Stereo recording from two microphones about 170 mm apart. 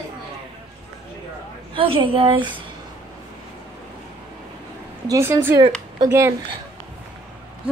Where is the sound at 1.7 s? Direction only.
30° right (ahead or behind).